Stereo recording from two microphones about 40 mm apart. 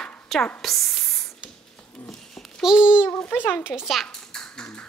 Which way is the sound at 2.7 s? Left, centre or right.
Right.